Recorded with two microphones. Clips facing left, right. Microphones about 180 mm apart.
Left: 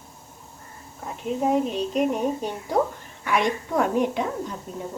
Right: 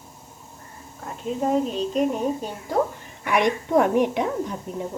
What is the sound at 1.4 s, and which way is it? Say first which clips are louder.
Speech: even; centre (ahead or behind).